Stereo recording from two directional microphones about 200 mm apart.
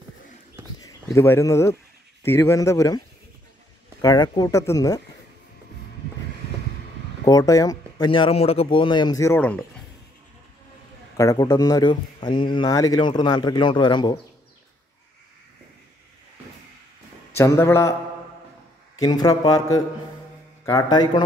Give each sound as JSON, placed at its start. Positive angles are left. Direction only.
{"t": 1.1, "sound": "speech", "side_deg": 15}
{"t": 4.0, "sound": "speech", "side_deg": 20}
{"t": 7.2, "sound": "speech", "side_deg": 15}
{"t": 11.1, "sound": "speech", "side_deg": 20}
{"t": 17.4, "sound": "speech", "side_deg": 15}
{"t": 18.9, "sound": "speech", "side_deg": 20}